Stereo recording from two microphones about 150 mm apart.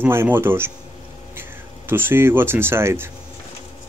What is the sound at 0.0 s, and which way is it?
Speech, 15° right (ahead or behind).